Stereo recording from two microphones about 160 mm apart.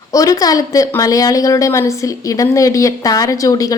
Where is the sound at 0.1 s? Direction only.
20° left (ahead or behind).